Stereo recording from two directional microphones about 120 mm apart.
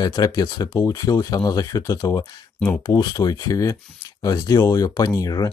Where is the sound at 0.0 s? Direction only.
30° left (ahead or behind).